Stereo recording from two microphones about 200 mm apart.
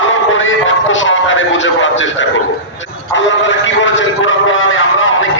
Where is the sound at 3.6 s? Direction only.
70° left (ahead or behind).